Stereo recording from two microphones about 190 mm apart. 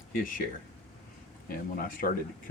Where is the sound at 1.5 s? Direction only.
45° left (ahead or behind).